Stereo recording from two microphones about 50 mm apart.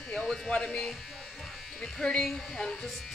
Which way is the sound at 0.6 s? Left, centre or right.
Centre.